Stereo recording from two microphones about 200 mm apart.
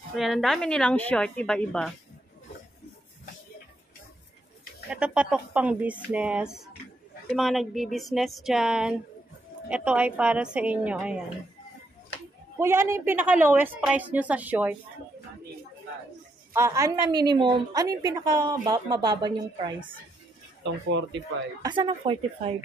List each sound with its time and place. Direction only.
0.1 s a woman's voice: centre (ahead or behind)
4.9 s a woman's voice: 5° right (ahead or behind)
12.5 s a woman's voice: 10° right (ahead or behind)
16.5 s a woman's voice: 15° right (ahead or behind)
21.1 s speech: 60° right (ahead or behind)
21.6 s a woman's voice: 25° right (ahead or behind)